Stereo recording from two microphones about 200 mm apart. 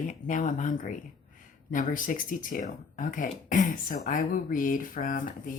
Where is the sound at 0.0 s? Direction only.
40° left (ahead or behind).